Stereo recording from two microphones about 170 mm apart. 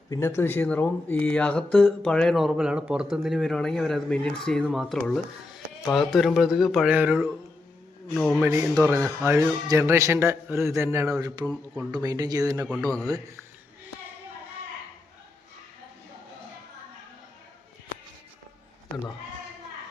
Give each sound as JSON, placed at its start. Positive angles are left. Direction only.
{"t": 0.1, "sound": "speech", "side_deg": 15}
{"t": 8.1, "sound": "speech", "side_deg": 5}
{"t": 8.4, "sound": "speech", "side_deg": -15}